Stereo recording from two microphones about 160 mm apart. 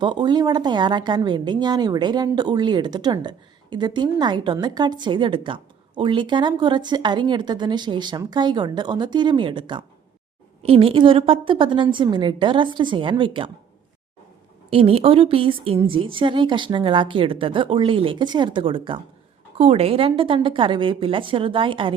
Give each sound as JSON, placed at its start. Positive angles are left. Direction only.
{"t": 0.0, "sound": "a woman's voice", "side_deg": -30}
{"t": 14.7, "sound": "a woman's voice", "side_deg": -35}